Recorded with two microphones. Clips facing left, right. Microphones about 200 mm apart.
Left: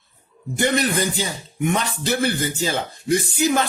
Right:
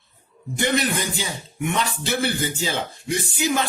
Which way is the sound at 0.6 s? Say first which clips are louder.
Left 2 dB; 40° left (ahead or behind).